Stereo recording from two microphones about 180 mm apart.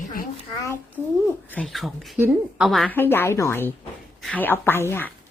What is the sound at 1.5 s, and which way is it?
A woman's voice, 5° left (ahead or behind).